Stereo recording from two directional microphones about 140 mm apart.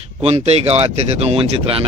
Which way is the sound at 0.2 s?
50° right (ahead or behind).